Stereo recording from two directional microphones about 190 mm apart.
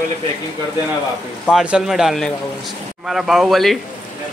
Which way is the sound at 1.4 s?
5° right (ahead or behind).